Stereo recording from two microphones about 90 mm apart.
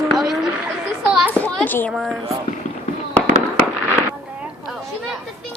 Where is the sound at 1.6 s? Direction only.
20° left (ahead or behind).